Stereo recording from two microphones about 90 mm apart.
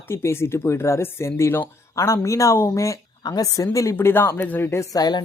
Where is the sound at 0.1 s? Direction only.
30° left (ahead or behind).